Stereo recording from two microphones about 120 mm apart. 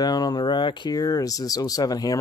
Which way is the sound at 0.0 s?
35° left (ahead or behind).